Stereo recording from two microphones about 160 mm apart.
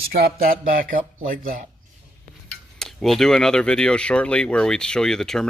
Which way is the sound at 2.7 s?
Centre (ahead or behind).